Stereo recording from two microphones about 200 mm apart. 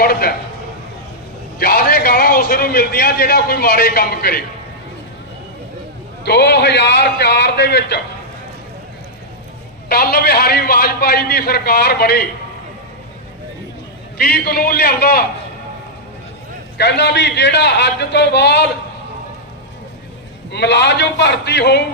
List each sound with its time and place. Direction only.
0.0 s a sound: 50° left (ahead or behind)
1.5 s a man's voice: 50° left (ahead or behind)
6.2 s a man's voice: 55° left (ahead or behind)
9.9 s a man's voice: 50° left (ahead or behind)
14.2 s a man's voice: 50° left (ahead or behind)
16.7 s a man's voice: 55° left (ahead or behind)
20.5 s a man's voice: 60° left (ahead or behind)